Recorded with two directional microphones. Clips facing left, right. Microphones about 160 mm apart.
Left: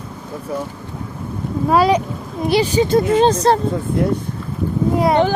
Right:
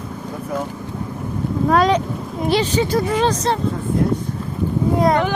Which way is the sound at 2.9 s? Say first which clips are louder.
Left 4 dB; 25° left (ahead or behind).